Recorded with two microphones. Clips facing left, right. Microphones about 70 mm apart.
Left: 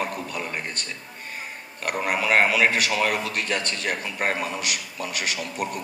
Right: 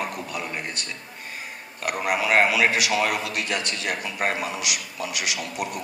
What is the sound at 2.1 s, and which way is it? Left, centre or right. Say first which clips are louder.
A man's voice: even; left.